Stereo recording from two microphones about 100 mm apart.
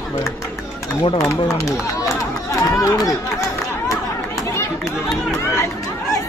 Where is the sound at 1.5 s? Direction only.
30° left (ahead or behind).